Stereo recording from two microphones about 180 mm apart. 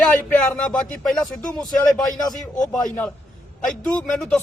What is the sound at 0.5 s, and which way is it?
A man's voice, 5° left (ahead or behind).